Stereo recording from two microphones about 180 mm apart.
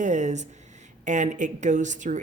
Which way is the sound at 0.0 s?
40° right (ahead or behind).